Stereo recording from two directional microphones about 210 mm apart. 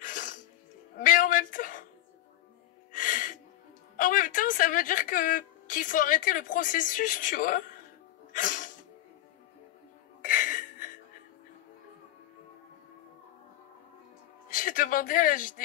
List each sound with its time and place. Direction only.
0.0 s music: 40° left (ahead or behind)
0.9 s a sound: 40° left (ahead or behind)
2.9 s music: 40° left (ahead or behind)
3.9 s speech: 40° left (ahead or behind)
8.3 s music: 40° left (ahead or behind)
10.2 s music: 40° left (ahead or behind)
14.5 s a sound: 40° left (ahead or behind)